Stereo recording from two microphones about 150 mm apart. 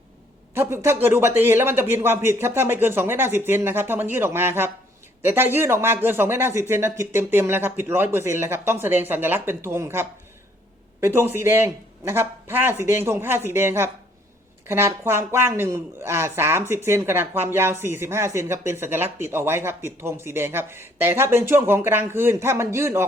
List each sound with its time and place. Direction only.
0.5 s speech: 15° right (ahead or behind)